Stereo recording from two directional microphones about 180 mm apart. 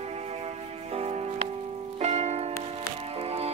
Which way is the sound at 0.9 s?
35° right (ahead or behind).